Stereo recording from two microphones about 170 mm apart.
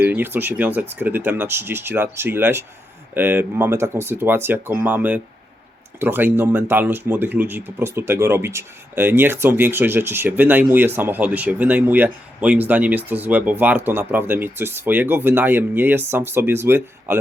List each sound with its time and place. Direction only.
0.0 s speech: 10° right (ahead or behind)